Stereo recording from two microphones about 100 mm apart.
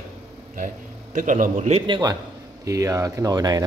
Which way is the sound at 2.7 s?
35° right (ahead or behind).